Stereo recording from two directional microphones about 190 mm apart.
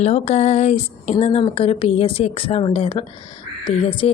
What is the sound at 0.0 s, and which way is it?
A woman's voice, 35° left (ahead or behind).